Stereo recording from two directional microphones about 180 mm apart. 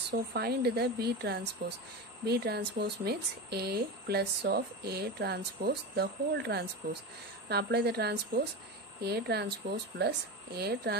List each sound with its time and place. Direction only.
0.3 s speech: 60° right (ahead or behind)